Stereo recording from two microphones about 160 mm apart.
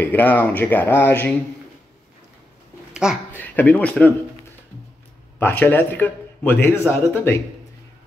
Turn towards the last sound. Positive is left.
turn(degrees=15)  # may be behind; listen again after turning